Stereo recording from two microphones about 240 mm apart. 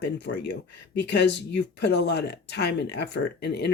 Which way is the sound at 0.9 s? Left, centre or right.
Left.